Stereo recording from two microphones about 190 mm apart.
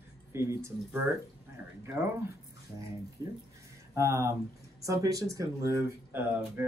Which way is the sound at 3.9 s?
15° right (ahead or behind).